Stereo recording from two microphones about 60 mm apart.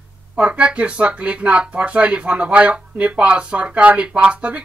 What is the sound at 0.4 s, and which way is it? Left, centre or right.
Speech, centre.